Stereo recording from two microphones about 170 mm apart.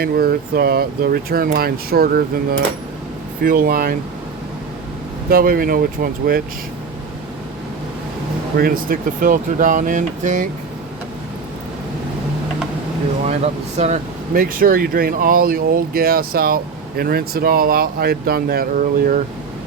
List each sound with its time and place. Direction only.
0.0 s speech: 65° right (ahead or behind)
5.3 s speech: 60° right (ahead or behind)
8.5 s speech: 60° right (ahead or behind)
13.2 s speech: 40° right (ahead or behind)
14.3 s speech: 55° right (ahead or behind)